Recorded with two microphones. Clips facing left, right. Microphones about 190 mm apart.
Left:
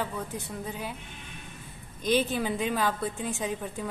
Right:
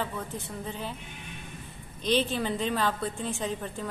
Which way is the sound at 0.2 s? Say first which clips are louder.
Left 1 dB; 5° left (ahead or behind).